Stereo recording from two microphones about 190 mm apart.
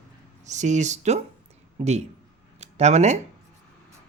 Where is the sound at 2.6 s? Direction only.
35° right (ahead or behind).